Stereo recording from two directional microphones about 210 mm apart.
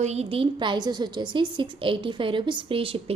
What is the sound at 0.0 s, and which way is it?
A woman's voice, 30° right (ahead or behind).